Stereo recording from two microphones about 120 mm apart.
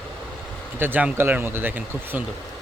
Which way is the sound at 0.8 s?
15° right (ahead or behind).